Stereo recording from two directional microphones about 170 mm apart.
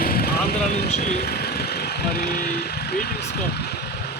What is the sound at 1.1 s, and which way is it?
Speech, 65° left (ahead or behind).